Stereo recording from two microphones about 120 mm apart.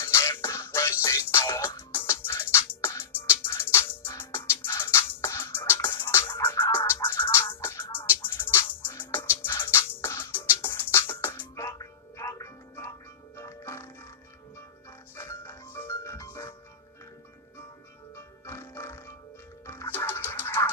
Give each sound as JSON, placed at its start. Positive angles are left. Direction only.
{"t": 0.0, "sound": "music", "side_deg": 20}
{"t": 15.1, "sound": "music", "side_deg": 25}
{"t": 18.1, "sound": "music", "side_deg": 20}